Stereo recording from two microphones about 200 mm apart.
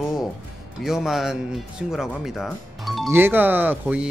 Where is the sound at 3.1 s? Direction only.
10° right (ahead or behind).